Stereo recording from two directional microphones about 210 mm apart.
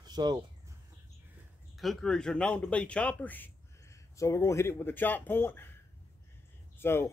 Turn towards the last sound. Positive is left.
turn(degrees=10)  # may be behind; listen again after turning